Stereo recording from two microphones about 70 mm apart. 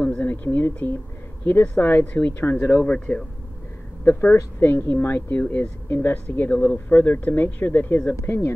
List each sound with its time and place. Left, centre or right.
0.0 s a sound: left
1.8 s speech: left
2.9 s speech: centre
4.0 s speech: left
6.5 s speech: centre
6.9 s speech: left
8.2 s speech: left